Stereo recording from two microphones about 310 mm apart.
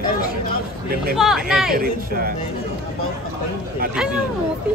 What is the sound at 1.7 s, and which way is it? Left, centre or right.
Speech, right.